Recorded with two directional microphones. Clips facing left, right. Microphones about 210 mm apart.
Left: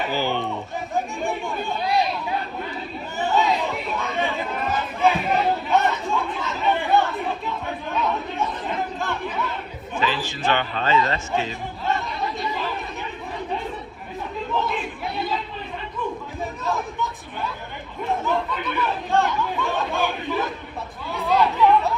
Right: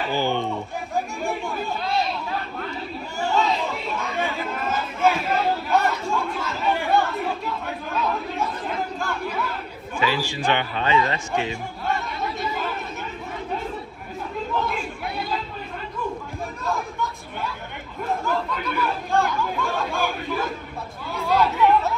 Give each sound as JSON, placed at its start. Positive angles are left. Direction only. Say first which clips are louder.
{"t": 0.1, "sound": "chatter", "louder": "right 1 dB", "side_deg": -15}
{"t": 0.9, "sound": "chatter", "louder": "left 1 dB", "side_deg": 0}
{"t": 3.2, "sound": "chatter", "louder": "left 1 dB", "side_deg": 0}
{"t": 9.9, "sound": "a man's voice", "louder": "right 1 dB", "side_deg": -10}
{"t": 10.5, "sound": "speech", "louder": "left 1 dB", "side_deg": 45}
{"t": 10.9, "sound": "speech", "louder": "even", "side_deg": -15}
{"t": 11.9, "sound": "chatter", "louder": "left 1 dB", "side_deg": 0}
{"t": 14.5, "sound": "crowd", "louder": "left 2 dB", "side_deg": 0}
{"t": 16.6, "sound": "chatter", "louder": "even", "side_deg": 0}
{"t": 18.3, "sound": "speech", "louder": "left 1 dB", "side_deg": 0}